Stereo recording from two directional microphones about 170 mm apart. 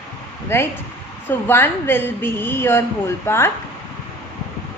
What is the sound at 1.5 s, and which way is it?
A woman's voice, 15° left (ahead or behind).